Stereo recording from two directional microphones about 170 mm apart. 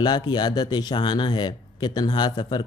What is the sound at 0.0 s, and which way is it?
Speech, 25° left (ahead or behind).